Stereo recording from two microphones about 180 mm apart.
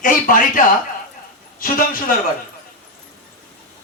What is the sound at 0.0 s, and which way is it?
A man's voice, 50° left (ahead or behind).